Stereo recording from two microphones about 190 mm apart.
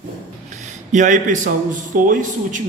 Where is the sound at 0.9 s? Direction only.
40° right (ahead or behind).